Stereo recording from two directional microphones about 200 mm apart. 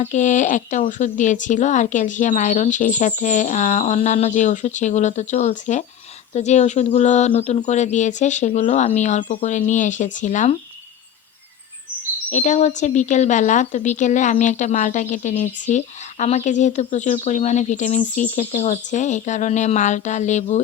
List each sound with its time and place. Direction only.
0.0 s a woman's voice: 40° left (ahead or behind)
12.3 s a woman's voice: 35° left (ahead or behind)